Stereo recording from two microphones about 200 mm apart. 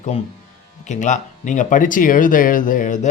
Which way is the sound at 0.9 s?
40° left (ahead or behind).